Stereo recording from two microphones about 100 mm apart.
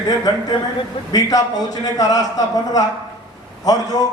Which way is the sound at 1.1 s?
40° left (ahead or behind).